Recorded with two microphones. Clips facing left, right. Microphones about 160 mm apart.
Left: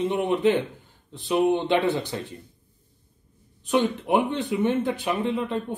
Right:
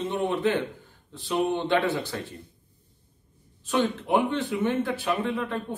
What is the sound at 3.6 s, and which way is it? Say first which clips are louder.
A man's voice: left 3 dB; 20° left (ahead or behind).